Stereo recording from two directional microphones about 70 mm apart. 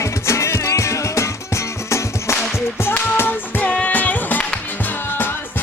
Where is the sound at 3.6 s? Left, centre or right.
Left.